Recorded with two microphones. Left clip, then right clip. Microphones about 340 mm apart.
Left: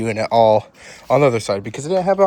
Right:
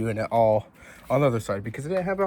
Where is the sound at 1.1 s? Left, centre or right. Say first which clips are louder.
Left 8 dB; left.